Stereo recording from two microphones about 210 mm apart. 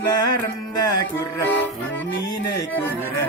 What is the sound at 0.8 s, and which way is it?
Music, 20° left (ahead or behind).